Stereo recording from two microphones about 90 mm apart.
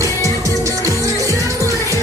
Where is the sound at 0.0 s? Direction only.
35° right (ahead or behind).